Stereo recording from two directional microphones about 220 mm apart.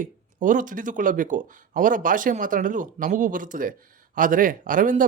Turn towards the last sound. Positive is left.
turn(degrees=-35)  # may be behind; listen again after turning